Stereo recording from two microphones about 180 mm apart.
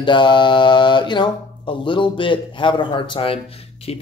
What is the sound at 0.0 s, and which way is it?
Speech, 25° left (ahead or behind).